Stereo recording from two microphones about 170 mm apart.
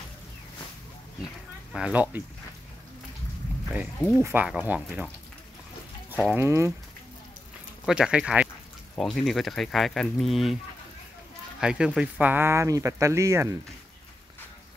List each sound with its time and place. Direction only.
1.7 s speech: 5° right (ahead or behind)
4.2 s speech: 10° right (ahead or behind)
6.3 s speech: 15° right (ahead or behind)
7.8 s speech: 5° right (ahead or behind)
11.6 s speech: 5° right (ahead or behind)